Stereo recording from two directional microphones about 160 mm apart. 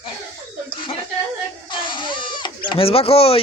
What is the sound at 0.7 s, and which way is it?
Chuckle, 30° left (ahead or behind).